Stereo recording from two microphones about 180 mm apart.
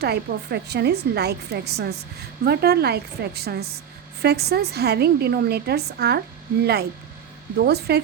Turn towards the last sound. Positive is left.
turn(degrees=-65)  # may be behind; listen again after turning